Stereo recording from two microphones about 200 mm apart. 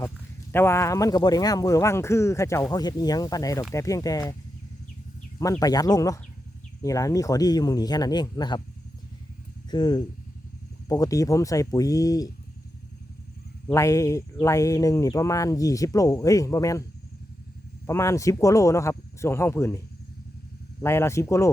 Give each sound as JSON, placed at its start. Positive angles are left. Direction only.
{"t": 0.5, "sound": "speech", "side_deg": 10}
{"t": 5.4, "sound": "speech", "side_deg": 15}
{"t": 9.6, "sound": "speech", "side_deg": 20}
{"t": 13.7, "sound": "speech", "side_deg": 15}
{"t": 17.8, "sound": "speech", "side_deg": 15}
{"t": 20.8, "sound": "speech", "side_deg": 15}